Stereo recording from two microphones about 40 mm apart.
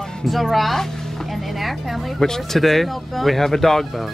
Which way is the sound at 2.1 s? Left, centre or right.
Centre.